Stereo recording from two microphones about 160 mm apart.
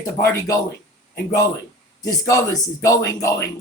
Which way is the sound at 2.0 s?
20° left (ahead or behind).